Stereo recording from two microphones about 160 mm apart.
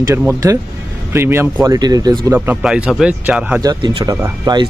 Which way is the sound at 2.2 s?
15° right (ahead or behind).